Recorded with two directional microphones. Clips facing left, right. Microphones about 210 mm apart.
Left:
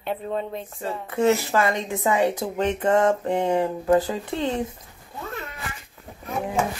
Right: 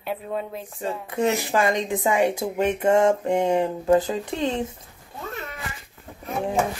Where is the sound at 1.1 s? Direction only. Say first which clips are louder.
Left 3 dB; 15° right (ahead or behind).